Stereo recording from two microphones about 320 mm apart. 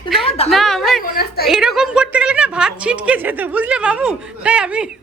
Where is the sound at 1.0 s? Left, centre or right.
Left.